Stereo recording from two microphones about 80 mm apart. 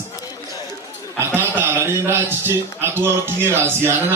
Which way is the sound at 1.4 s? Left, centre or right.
Right.